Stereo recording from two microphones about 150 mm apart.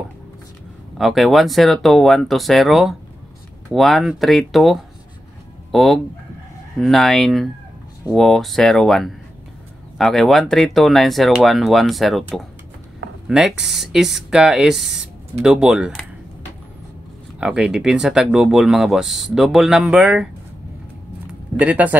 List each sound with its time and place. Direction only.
0.9 s speech: centre (ahead or behind)
13.3 s speech: 5° right (ahead or behind)
17.4 s speech: 5° right (ahead or behind)
21.5 s speech: 10° right (ahead or behind)